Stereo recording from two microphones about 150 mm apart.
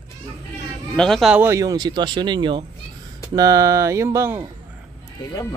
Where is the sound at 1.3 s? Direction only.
15° right (ahead or behind).